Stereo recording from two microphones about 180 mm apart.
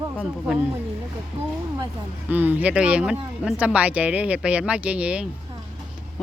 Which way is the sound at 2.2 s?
10° right (ahead or behind).